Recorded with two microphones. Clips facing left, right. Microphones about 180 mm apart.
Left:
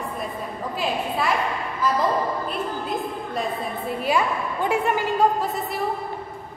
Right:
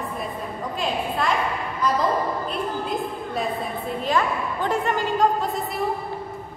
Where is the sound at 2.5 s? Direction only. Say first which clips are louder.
Right 1 dB; centre (ahead or behind).